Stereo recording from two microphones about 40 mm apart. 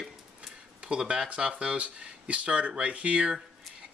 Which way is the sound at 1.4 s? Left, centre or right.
Right.